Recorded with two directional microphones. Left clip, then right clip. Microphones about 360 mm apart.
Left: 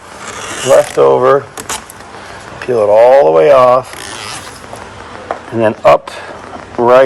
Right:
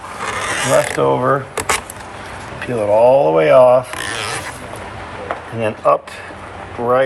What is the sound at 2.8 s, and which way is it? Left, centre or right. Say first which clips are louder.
A man's voice: left 5 dB; left.